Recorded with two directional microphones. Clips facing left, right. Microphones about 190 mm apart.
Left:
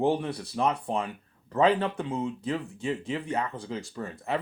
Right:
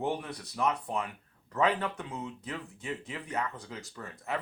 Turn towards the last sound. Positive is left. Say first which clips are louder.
# left 5 dB
turn(degrees=30)  # may be behind; listen again after turning